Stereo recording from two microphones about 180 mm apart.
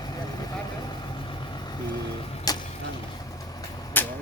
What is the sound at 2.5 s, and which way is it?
Vehicle, 20° left (ahead or behind).